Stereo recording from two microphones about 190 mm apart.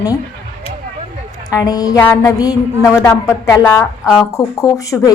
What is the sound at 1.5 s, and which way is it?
Music, 20° left (ahead or behind).